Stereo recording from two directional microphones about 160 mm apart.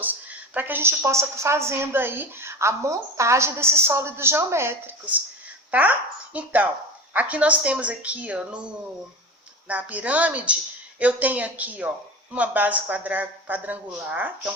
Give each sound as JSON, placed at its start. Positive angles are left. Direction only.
{"t": 0.0, "sound": "a woman's voice", "side_deg": -10}